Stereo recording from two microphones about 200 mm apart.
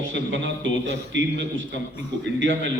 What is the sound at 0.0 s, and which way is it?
A man's voice, 70° right (ahead or behind).